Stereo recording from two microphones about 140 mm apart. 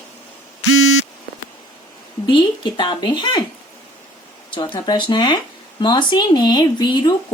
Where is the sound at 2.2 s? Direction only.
35° left (ahead or behind).